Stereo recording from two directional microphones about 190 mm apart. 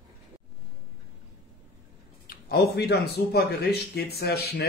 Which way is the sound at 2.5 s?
60° left (ahead or behind).